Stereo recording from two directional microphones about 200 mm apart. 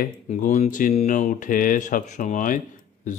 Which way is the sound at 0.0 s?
40° left (ahead or behind).